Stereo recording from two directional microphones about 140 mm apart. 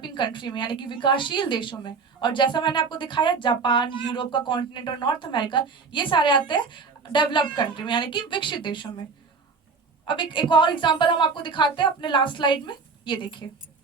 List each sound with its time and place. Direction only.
0.0 s a woman's voice: 35° left (ahead or behind)
10.1 s a woman's voice: 35° left (ahead or behind)